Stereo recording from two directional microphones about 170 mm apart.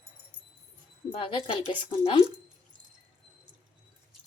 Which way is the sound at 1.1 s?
30° left (ahead or behind).